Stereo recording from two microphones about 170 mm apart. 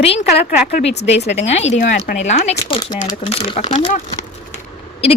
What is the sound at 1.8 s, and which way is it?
Speech, 55° left (ahead or behind).